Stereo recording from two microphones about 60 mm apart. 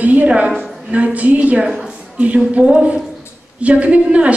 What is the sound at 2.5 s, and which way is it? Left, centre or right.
A man's voice, right.